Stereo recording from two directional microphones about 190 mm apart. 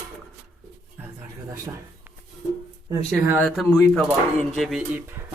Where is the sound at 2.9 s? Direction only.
15° right (ahead or behind).